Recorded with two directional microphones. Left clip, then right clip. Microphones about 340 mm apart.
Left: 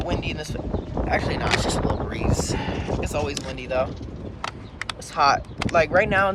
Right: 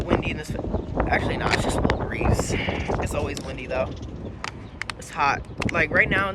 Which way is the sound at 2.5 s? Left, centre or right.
Left.